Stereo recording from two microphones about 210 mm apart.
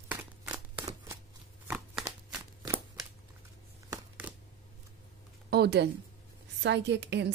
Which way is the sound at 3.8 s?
15° right (ahead or behind).